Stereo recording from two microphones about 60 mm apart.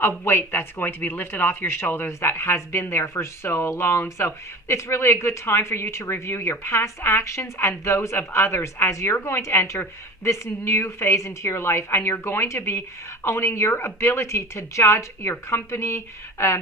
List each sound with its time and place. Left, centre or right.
0.3 s speech: left